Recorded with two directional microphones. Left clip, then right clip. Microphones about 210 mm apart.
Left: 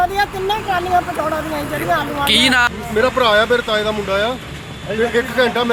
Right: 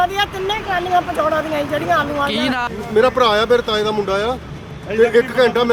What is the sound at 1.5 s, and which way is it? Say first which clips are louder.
Speech: right 2 dB; 25° right (ahead or behind).